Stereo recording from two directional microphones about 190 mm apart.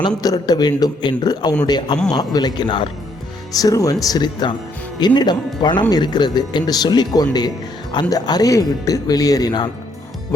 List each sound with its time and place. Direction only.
0.2 s speech: 20° left (ahead or behind)